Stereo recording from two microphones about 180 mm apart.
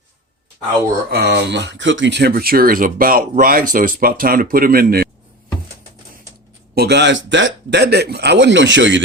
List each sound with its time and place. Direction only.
1.1 s speech: 70° right (ahead or behind)
6.7 s speech: 70° right (ahead or behind); by 9.0 s 90° right